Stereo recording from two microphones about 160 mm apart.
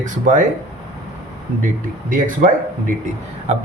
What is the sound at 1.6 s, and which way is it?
Speech, 60° right (ahead or behind).